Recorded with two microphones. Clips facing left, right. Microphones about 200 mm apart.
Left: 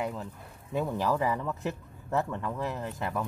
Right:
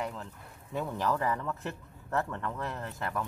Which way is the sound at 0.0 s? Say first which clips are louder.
Left 3 dB; 10° left (ahead or behind).